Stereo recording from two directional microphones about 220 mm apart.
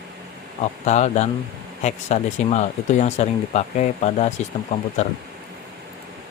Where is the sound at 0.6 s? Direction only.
30° left (ahead or behind).